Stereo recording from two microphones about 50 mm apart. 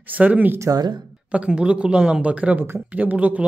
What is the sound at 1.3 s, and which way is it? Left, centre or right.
Speech, right.